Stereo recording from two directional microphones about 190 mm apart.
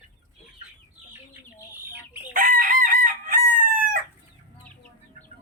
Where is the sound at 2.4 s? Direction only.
45° right (ahead or behind).